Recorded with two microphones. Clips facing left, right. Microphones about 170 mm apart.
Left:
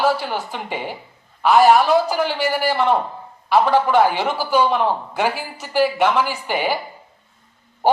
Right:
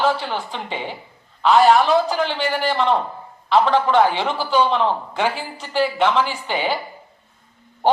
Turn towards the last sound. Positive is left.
turn(degrees=10)  # may be behind; listen again after turning